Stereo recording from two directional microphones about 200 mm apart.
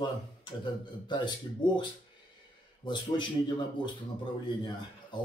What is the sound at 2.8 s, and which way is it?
Speech, 20° left (ahead or behind).